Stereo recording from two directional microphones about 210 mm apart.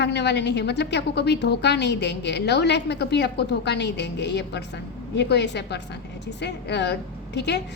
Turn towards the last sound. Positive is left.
turn(degrees=55)  # may be behind; listen again after turning